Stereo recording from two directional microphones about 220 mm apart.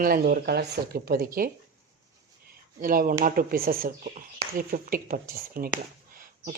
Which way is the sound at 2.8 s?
40° right (ahead or behind).